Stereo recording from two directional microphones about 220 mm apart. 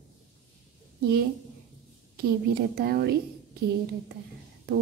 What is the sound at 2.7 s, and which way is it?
Speech, 45° right (ahead or behind).